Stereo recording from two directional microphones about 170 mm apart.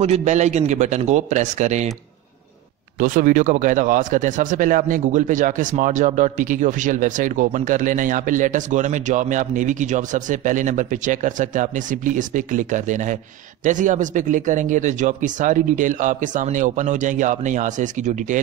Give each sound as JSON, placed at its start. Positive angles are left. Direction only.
{"t": 0.0, "sound": "speech", "side_deg": -40}
{"t": 3.0, "sound": "speech", "side_deg": -50}